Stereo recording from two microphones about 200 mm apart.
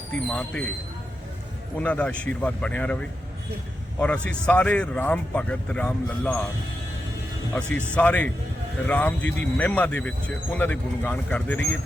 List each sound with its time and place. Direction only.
0.3 s speech: 5° left (ahead or behind)
1.8 s speech: 5° left (ahead or behind)
4.0 s speech: 5° left (ahead or behind)
7.5 s speech: 5° left (ahead or behind)